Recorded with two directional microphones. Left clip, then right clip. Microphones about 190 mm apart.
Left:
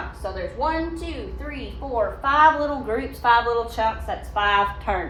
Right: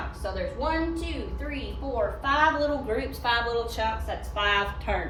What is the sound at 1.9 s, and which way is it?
A woman's voice, 15° left (ahead or behind).